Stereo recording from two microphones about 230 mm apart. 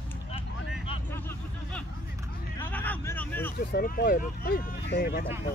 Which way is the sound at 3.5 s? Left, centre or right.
Left.